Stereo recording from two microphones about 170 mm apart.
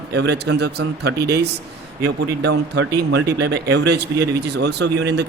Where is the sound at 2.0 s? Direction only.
90° right.